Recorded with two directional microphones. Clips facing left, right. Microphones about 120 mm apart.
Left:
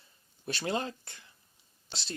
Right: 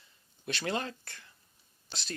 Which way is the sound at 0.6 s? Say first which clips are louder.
Left 2 dB; 25° left (ahead or behind).